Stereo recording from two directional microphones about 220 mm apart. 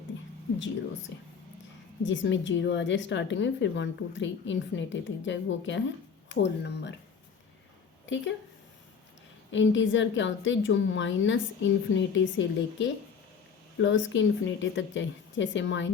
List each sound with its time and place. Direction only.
2.0 s a woman's voice: 55° left (ahead or behind)
8.0 s speech: 55° left (ahead or behind)
9.5 s a woman's voice: 55° left (ahead or behind)